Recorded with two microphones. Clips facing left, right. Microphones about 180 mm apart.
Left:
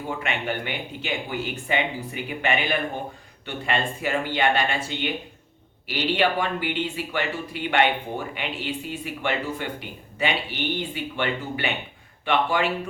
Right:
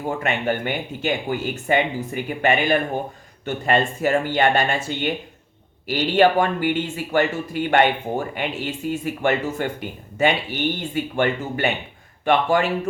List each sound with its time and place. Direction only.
0.2 s speech: 45° right (ahead or behind)